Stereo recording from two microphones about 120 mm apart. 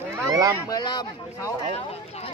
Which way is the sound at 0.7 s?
35° left (ahead or behind).